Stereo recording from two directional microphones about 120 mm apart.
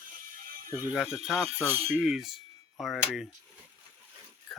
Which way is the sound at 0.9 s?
5° right (ahead or behind).